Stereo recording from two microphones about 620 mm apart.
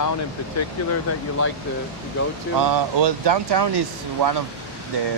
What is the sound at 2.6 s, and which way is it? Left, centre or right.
Speech, right.